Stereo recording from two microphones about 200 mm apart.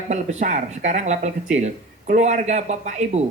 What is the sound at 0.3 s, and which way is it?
Speech, 40° right (ahead or behind).